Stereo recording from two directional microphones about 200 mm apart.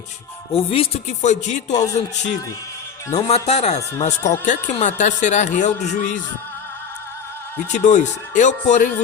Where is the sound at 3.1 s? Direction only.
30° left (ahead or behind).